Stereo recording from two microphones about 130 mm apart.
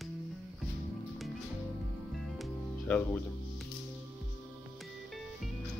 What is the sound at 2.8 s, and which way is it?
Music, 10° left (ahead or behind).